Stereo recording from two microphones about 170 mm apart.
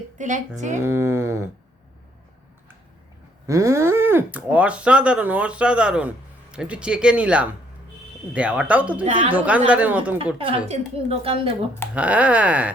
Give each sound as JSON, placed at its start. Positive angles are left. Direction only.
{"t": 0.2, "sound": "speech", "side_deg": -45}
{"t": 0.8, "sound": "speech", "side_deg": -15}
{"t": 3.4, "sound": "speech", "side_deg": -15}
{"t": 10.3, "sound": "a woman's voice", "side_deg": -30}
{"t": 11.9, "sound": "speech", "side_deg": -10}